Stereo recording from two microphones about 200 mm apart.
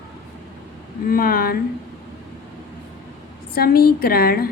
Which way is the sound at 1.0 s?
45° left (ahead or behind).